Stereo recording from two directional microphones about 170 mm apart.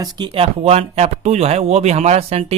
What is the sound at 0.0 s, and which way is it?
Speech, 30° right (ahead or behind).